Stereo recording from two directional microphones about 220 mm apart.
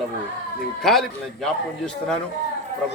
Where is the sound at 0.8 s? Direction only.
Centre (ahead or behind).